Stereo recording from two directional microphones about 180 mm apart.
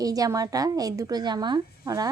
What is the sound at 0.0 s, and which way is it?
Speech, 20° right (ahead or behind).